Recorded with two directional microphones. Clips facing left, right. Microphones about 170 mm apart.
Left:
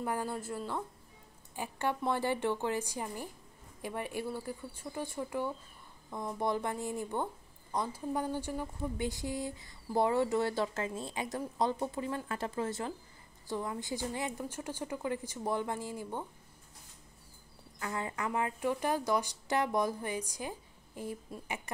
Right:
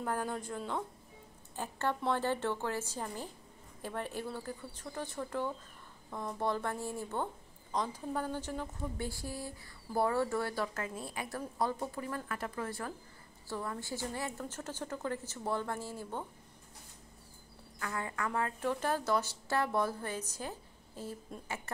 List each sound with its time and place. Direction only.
0.0 s a woman's voice: 10° left (ahead or behind)
17.7 s a woman's voice: 20° left (ahead or behind)